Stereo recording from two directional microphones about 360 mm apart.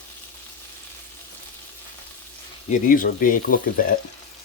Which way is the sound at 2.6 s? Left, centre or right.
Left.